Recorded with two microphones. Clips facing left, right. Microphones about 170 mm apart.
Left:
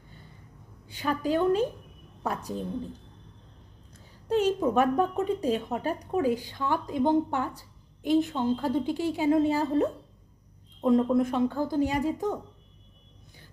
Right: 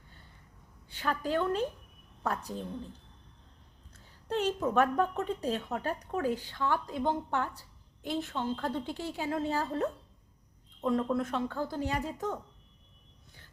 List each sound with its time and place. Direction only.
0.9 s a woman's voice: 15° left (ahead or behind)
4.3 s a woman's voice: 15° left (ahead or behind)